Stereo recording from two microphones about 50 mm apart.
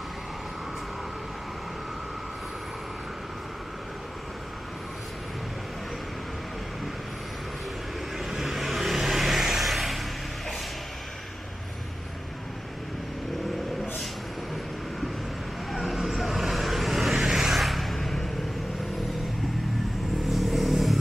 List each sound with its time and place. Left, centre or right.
8.2 s vehicle: centre
15.7 s vehicle: centre
20.2 s vehicle: centre